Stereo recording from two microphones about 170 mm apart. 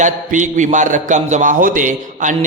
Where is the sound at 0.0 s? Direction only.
45° right (ahead or behind).